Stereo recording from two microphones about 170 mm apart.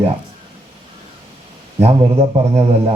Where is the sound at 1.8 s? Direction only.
35° right (ahead or behind).